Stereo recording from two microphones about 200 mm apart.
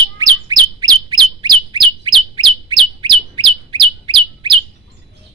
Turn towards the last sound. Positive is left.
turn(degrees=-25)  # may be behind; listen again after turning